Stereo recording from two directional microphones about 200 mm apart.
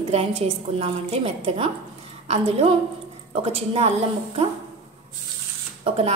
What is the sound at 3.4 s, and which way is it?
Speech, 30° right (ahead or behind).